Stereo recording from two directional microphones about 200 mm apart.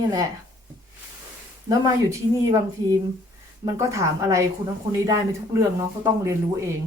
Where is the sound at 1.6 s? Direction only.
15° right (ahead or behind).